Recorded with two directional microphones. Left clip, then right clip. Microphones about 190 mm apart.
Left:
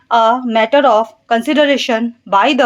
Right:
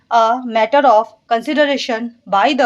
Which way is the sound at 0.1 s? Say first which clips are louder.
Left 2 dB; 25° left (ahead or behind).